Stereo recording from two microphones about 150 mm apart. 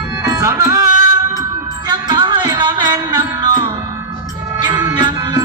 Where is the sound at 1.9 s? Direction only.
25° right (ahead or behind).